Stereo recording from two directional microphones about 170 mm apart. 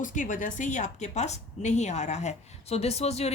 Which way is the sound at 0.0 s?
50° left (ahead or behind).